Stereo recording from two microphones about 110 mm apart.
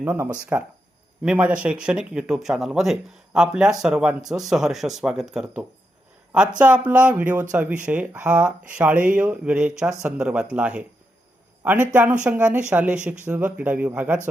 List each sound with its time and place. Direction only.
0.0 s speech: 15° right (ahead or behind)
6.6 s a man's voice: 10° right (ahead or behind)